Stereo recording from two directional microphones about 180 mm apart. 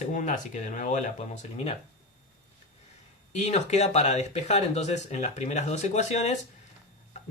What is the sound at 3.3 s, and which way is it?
Speech, 40° left (ahead or behind).